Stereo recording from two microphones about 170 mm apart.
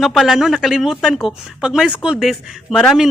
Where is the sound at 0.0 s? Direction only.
Centre (ahead or behind).